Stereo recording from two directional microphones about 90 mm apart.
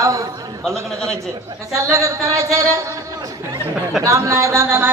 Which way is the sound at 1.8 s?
35° right (ahead or behind).